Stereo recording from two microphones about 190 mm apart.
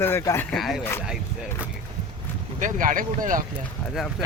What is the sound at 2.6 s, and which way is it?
Speech, 45° right (ahead or behind).